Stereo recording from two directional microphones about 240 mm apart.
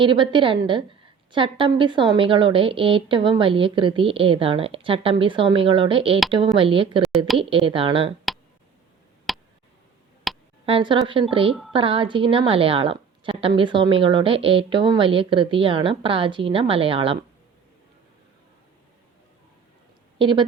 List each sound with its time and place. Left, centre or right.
0.0 s a woman's voice: centre
9.3 s a sound: centre
10.7 s a woman's voice: right
20.1 s speech: centre